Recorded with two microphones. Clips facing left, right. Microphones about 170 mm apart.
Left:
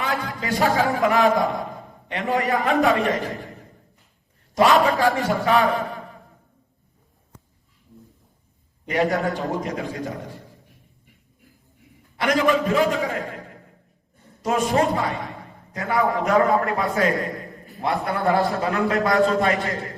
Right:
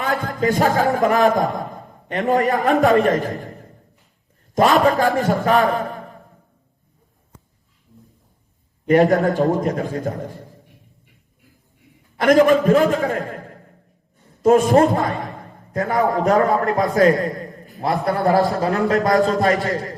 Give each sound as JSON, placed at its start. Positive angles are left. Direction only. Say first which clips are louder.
{"t": 0.0, "sound": "a sound", "louder": "right 6 dB", "side_deg": -40}
{"t": 0.8, "sound": "a man's voice", "louder": "right 2 dB", "side_deg": -40}
{"t": 1.5, "sound": "a sound", "louder": "right 1 dB", "side_deg": -45}
{"t": 2.6, "sound": "a man's voice", "louder": "right 5 dB", "side_deg": -40}
{"t": 8.9, "sound": "a man's voice", "louder": "right 7 dB", "side_deg": -40}
{"t": 12.1, "sound": "a man's voice", "louder": "right 7 dB", "side_deg": -45}
{"t": 14.4, "sound": "a man's voice", "louder": "right 7 dB", "side_deg": -40}